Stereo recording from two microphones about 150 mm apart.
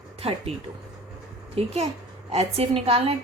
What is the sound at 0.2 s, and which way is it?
Speech, 40° right (ahead or behind).